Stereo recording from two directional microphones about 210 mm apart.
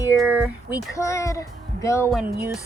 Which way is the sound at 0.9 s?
15° left (ahead or behind).